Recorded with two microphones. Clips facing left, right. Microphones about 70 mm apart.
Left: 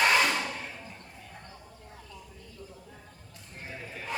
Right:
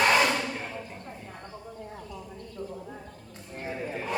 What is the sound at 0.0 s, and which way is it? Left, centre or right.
Hair dryer, centre.